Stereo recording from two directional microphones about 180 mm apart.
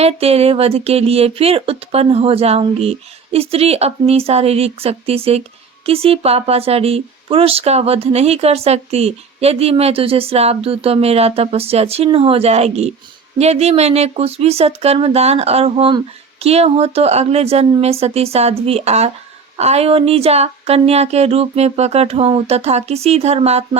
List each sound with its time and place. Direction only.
0.0 s speech: 35° right (ahead or behind)